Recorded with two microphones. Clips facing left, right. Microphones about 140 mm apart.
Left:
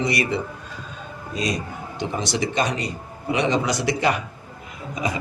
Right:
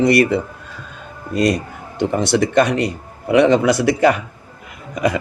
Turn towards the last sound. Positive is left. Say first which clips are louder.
# right 7 dB
turn(degrees=-60)  # may be behind; listen again after turning